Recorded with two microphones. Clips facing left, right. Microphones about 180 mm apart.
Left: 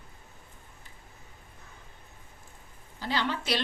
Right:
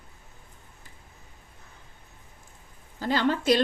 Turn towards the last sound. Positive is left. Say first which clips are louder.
# right 7 dB
turn(degrees=-45)  # may be behind; listen again after turning